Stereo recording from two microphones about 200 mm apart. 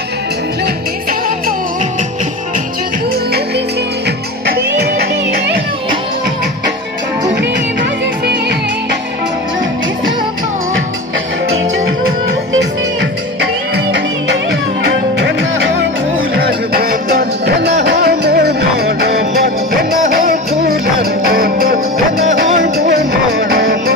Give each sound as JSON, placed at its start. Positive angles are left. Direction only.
{"t": 13.9, "sound": "music", "side_deg": -60}
{"t": 16.3, "sound": "music", "side_deg": -50}